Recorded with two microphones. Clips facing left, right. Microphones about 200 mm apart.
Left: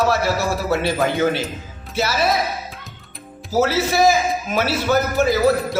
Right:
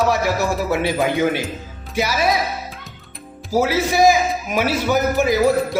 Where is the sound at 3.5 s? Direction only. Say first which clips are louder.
Even; 15° right (ahead or behind).